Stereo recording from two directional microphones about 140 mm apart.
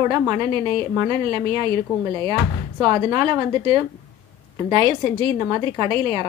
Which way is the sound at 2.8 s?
30° right (ahead or behind).